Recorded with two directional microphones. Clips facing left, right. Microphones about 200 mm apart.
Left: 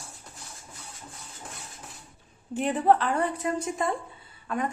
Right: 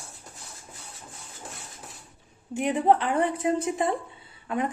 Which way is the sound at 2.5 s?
15° right (ahead or behind).